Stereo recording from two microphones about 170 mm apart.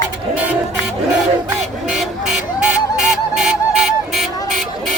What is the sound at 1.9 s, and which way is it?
Music, 5° right (ahead or behind).